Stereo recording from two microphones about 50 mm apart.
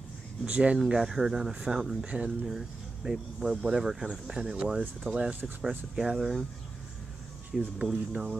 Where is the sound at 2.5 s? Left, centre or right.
Centre.